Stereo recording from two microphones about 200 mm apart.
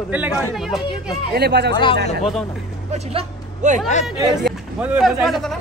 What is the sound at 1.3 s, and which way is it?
Speech, 55° right (ahead or behind).